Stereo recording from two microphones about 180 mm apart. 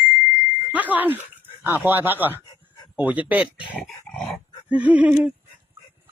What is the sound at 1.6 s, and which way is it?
Speech, 10° right (ahead or behind).